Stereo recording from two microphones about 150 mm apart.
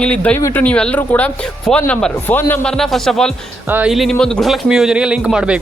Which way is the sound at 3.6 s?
10° right (ahead or behind).